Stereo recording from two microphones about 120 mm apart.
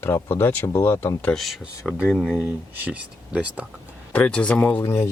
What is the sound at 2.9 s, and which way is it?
Speech, 10° right (ahead or behind).